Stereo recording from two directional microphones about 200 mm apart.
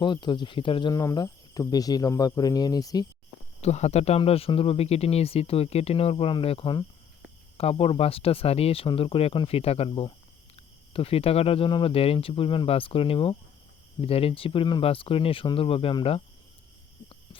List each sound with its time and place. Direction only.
0.0 s speech: 25° left (ahead or behind)
3.6 s speech: 35° left (ahead or behind)